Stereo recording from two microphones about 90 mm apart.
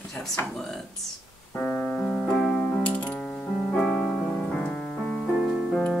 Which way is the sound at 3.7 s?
10° left (ahead or behind).